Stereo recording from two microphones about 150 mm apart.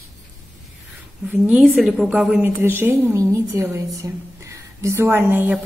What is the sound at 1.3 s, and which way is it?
A woman's voice, 5° right (ahead or behind).